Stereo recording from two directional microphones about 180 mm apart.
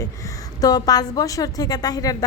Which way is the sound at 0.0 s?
20° left (ahead or behind).